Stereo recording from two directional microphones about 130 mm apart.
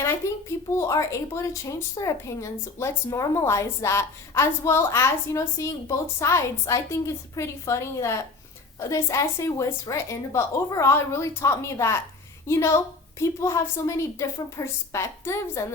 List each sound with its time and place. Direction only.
0.2 s a woman's voice: 20° left (ahead or behind)